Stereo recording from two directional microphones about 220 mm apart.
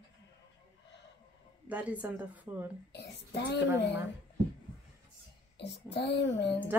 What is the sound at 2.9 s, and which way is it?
Speech, 50° left (ahead or behind).